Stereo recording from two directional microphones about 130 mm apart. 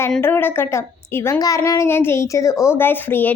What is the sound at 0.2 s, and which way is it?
A woman's voice, 15° left (ahead or behind).